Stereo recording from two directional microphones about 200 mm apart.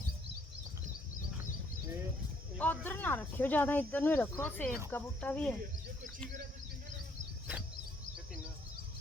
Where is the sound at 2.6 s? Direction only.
10° left (ahead or behind).